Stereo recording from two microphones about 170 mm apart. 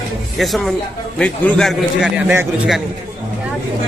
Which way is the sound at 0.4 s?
Centre (ahead or behind).